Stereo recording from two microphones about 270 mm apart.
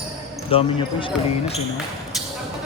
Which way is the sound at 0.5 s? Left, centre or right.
Centre.